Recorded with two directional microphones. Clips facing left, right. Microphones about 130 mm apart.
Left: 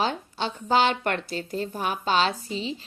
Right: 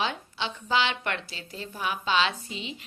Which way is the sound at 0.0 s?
40° left (ahead or behind).